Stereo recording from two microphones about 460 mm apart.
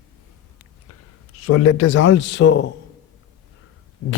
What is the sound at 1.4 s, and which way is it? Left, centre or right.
Speech, left.